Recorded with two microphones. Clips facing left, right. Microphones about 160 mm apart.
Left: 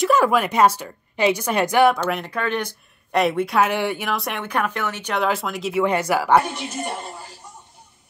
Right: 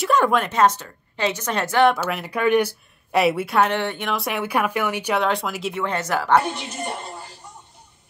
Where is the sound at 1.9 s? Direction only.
Centre (ahead or behind).